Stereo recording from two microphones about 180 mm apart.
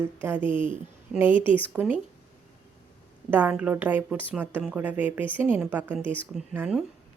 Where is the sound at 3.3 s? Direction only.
10° right (ahead or behind).